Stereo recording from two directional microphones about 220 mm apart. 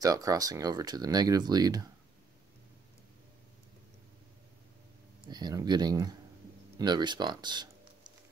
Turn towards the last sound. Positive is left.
turn(degrees=-20)  # may be behind; listen again after turning